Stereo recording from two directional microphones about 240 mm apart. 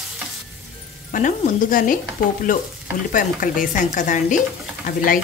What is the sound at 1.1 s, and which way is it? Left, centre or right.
Speech, left.